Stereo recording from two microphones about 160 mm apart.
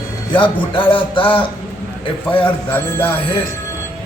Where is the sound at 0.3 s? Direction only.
30° left (ahead or behind).